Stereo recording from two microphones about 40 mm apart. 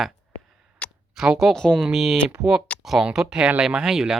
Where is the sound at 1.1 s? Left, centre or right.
Centre.